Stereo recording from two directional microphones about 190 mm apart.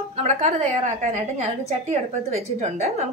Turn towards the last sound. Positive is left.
turn(degrees=-35)  # may be behind; listen again after turning